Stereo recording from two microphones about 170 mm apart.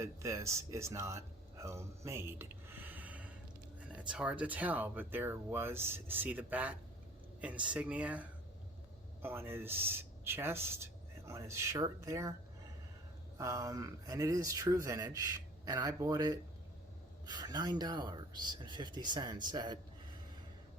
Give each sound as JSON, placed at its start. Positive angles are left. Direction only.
{"t": 0.0, "sound": "speech", "side_deg": -15}
{"t": 13.4, "sound": "speech", "side_deg": -20}